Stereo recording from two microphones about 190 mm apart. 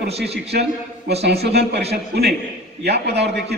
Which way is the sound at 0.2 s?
60° right (ahead or behind).